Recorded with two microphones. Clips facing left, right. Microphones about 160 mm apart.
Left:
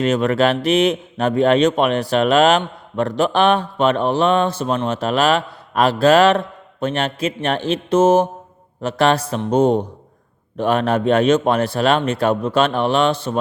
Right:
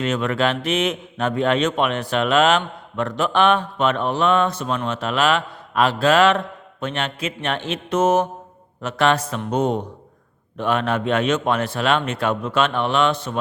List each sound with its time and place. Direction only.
0.0 s a man's voice: 40° left (ahead or behind)